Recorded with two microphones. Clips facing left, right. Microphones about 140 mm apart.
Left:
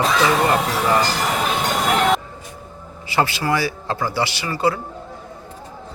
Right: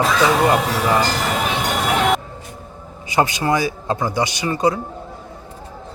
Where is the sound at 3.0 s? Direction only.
20° right (ahead or behind).